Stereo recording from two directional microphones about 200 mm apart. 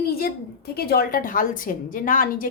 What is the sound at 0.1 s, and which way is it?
A woman's voice, 50° left (ahead or behind).